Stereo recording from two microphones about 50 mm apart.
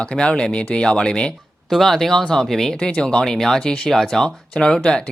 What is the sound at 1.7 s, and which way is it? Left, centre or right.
Speech, centre.